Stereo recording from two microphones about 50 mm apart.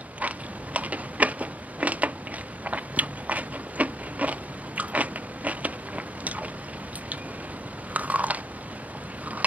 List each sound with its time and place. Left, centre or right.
0.2 s biting: right
0.7 s typing: right
2.6 s biting: right
7.9 s biting: right